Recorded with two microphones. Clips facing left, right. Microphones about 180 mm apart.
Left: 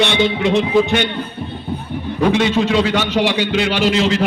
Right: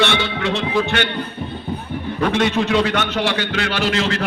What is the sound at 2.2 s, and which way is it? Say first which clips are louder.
Speech: left 3 dB; 10° left (ahead or behind).